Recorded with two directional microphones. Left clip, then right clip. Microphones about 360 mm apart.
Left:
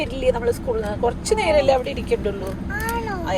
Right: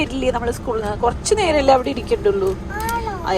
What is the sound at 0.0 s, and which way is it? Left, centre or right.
A woman's voice, centre.